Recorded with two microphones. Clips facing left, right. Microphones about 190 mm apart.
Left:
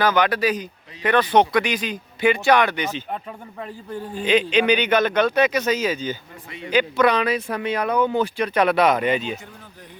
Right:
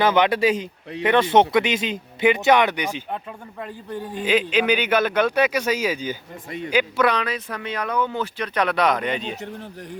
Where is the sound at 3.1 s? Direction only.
Centre (ahead or behind).